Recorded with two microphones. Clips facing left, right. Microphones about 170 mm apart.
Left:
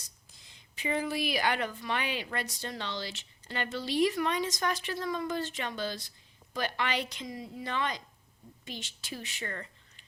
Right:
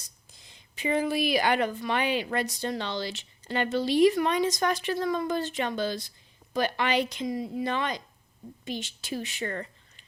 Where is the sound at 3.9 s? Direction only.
20° right (ahead or behind).